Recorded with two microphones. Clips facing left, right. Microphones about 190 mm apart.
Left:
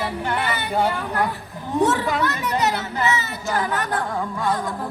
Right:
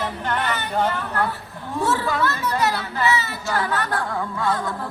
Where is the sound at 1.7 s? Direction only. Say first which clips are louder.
Left 3 dB; 20° left (ahead or behind).